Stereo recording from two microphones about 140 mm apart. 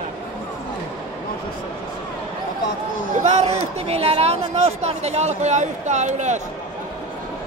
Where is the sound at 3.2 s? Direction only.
50° right (ahead or behind).